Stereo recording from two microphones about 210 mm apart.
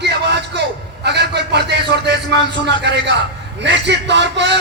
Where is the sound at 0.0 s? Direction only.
55° right (ahead or behind).